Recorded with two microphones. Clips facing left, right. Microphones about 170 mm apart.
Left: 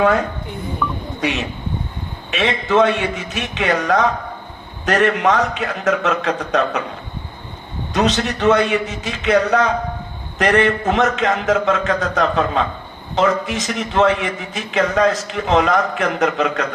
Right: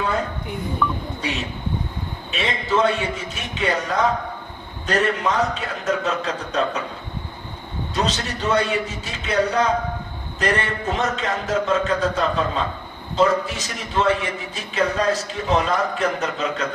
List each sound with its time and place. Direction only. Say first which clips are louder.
0.8 s speech: even; 5° left (ahead or behind)
2.3 s a man's voice: left 5 dB; 75° left (ahead or behind)
7.9 s a man's voice: left 7 dB; 70° left (ahead or behind)